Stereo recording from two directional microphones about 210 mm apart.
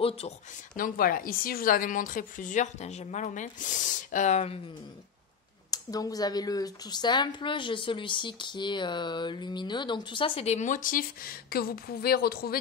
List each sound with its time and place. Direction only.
0.7 s a woman's voice: 40° left (ahead or behind)
5.7 s a woman's voice: 15° left (ahead or behind); by 12.5 s 45° left (ahead or behind)